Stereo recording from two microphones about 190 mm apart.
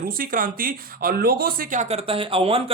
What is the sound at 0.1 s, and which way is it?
Speech, 50° right (ahead or behind).